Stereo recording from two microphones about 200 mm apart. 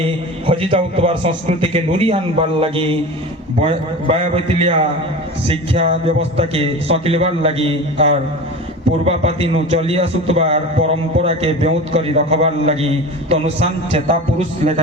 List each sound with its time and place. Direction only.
0.0 s a man's voice: 30° right (ahead or behind)
4.1 s a man's voice: 30° right (ahead or behind)
6.3 s a man's voice: 30° right (ahead or behind)